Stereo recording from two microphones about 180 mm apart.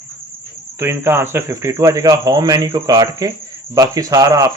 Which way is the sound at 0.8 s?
15° right (ahead or behind).